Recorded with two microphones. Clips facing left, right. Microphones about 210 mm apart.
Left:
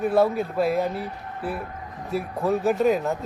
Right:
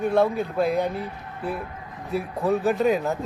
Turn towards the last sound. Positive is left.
turn(degrees=0)  # may be behind; listen again after turning